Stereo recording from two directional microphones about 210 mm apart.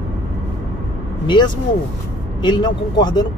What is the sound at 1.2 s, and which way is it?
Speech, 20° left (ahead or behind).